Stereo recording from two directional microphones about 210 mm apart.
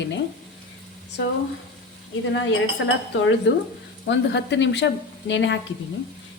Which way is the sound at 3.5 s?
60° left (ahead or behind).